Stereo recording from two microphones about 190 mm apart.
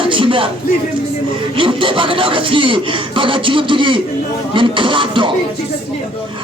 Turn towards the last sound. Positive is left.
turn(degrees=-25)  # may be behind; listen again after turning